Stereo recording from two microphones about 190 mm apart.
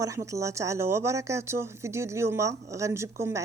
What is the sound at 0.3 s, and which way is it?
Speech, 15° right (ahead or behind).